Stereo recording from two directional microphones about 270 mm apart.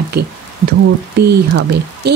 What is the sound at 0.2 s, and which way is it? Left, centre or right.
Speech, right.